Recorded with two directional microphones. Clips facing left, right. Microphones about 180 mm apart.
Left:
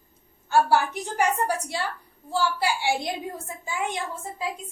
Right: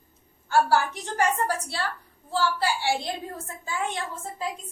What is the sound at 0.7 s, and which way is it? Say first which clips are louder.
A woman's voice: left 1 dB; 10° left (ahead or behind).